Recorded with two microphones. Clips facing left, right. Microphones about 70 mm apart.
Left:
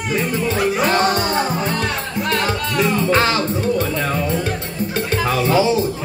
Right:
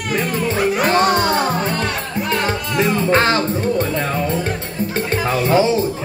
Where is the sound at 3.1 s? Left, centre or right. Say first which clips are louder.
Right 1 dB; right.